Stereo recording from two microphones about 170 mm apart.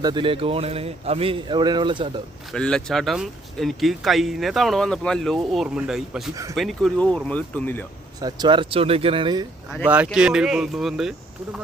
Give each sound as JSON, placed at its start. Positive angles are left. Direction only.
{"t": 0.0, "sound": "speech", "side_deg": -25}
{"t": 2.5, "sound": "speech", "side_deg": 5}
{"t": 6.3, "sound": "speech", "side_deg": -20}
{"t": 6.6, "sound": "speech", "side_deg": 0}
{"t": 8.2, "sound": "speech", "side_deg": -25}
{"t": 9.8, "sound": "speech", "side_deg": -10}